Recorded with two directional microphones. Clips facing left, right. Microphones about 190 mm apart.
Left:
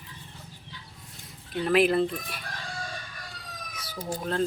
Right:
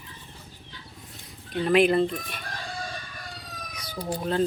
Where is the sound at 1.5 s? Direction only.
Centre (ahead or behind).